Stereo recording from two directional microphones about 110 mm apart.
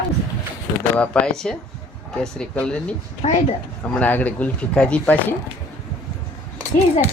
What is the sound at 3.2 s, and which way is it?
Speech, 75° left (ahead or behind).